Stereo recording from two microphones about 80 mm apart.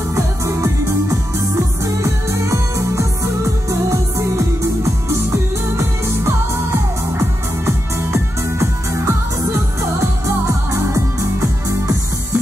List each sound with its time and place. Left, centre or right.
0.1 s music: right
2.0 s music: right
5.8 s music: right